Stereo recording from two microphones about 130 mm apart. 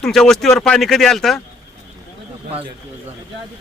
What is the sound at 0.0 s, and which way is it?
Speech, 5° left (ahead or behind).